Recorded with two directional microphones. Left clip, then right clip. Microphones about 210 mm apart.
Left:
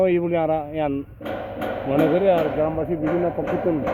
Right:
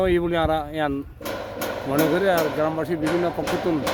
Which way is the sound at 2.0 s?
55° right (ahead or behind).